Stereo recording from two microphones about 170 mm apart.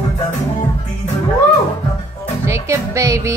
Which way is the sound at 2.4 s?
15° right (ahead or behind).